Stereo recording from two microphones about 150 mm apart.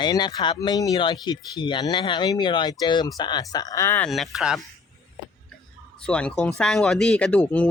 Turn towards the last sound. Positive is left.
turn(degrees=10)  # may be behind; listen again after turning